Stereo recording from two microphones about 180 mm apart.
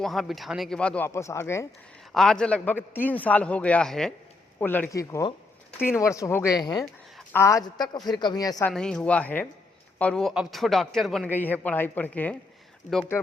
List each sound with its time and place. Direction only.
0.0 s speech: centre (ahead or behind)
2.1 s a man's voice: 5° left (ahead or behind); by 8.7 s 20° left (ahead or behind)
8.7 s a man's voice: 5° left (ahead or behind)